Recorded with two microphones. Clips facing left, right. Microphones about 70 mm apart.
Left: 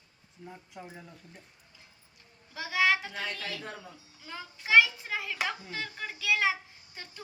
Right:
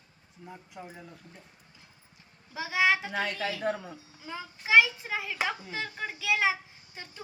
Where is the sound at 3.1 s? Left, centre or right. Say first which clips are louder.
Right 5 dB; right.